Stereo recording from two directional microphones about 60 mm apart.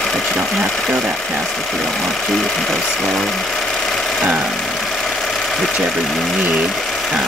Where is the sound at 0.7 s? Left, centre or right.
Centre.